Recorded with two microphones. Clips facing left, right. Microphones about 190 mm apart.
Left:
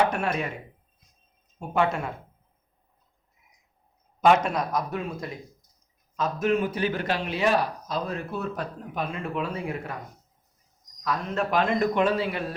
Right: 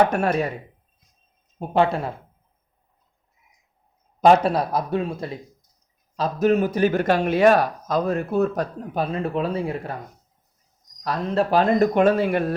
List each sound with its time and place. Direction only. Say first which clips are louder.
0.1 s speech: right 6 dB; 40° right (ahead or behind)
1.5 s speech: right 5 dB; 30° right (ahead or behind)
4.2 s speech: right 5 dB; 35° right (ahead or behind)
11.0 s speech: right 5 dB; 35° right (ahead or behind); by 12.5 s 50° right (ahead or behind)